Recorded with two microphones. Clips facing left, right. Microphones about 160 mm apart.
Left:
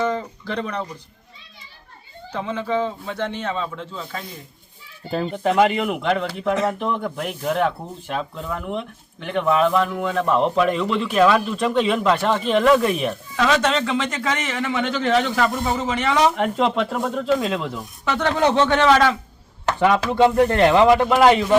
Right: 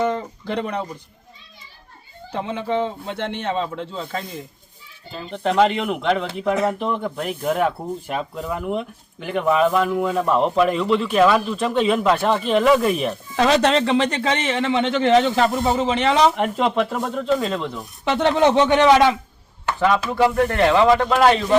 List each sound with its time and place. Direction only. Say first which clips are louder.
0.0 s a sound: right 1 dB; 20° right (ahead or behind)
2.3 s a man's voice: even; 25° right (ahead or behind)
5.3 s a man's voice: right 1 dB; 5° left (ahead or behind)
13.3 s a man's voice: right 3 dB; 35° right (ahead or behind)
16.3 s a man's voice: even; centre (ahead or behind)
18.0 s a man's voice: right 3 dB; 25° right (ahead or behind)
20.1 s speech: left 2 dB; 20° left (ahead or behind)